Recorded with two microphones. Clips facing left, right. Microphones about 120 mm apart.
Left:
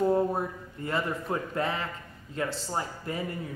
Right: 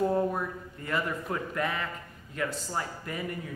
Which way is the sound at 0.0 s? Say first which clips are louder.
Left 2 dB; 25° left (ahead or behind).